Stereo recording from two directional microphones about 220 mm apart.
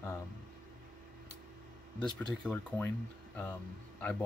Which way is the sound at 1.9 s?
5° left (ahead or behind).